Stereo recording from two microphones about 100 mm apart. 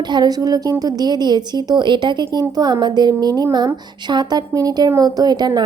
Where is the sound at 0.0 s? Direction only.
45° right (ahead or behind).